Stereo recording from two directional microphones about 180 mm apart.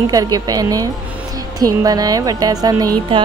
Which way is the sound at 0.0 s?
20° right (ahead or behind).